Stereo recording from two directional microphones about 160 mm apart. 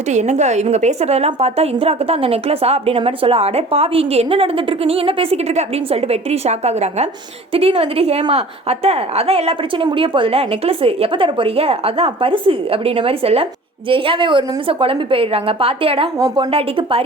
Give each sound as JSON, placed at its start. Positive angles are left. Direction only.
{"t": 0.1, "sound": "a woman's voice", "side_deg": -45}